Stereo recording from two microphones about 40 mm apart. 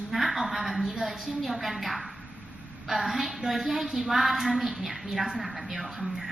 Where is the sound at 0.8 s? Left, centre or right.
Centre.